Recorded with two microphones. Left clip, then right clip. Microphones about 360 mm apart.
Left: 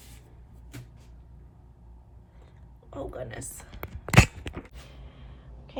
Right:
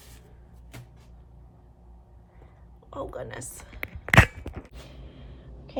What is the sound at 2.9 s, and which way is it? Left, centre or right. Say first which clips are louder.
Speech: right 2 dB; centre.